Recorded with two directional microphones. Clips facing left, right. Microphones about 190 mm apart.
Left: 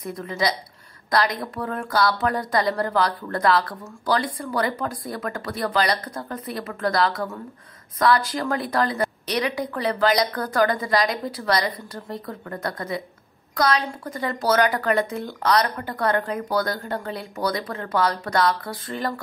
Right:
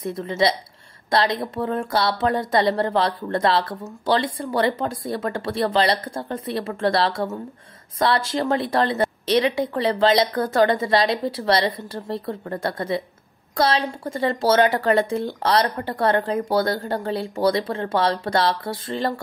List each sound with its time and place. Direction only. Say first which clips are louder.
0.0 s speech: right 4 dB; 25° right (ahead or behind)